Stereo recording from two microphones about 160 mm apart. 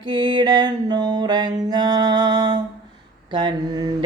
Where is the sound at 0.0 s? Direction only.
30° right (ahead or behind).